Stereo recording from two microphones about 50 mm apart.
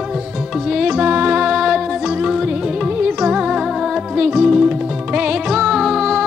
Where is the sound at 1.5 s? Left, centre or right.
Centre.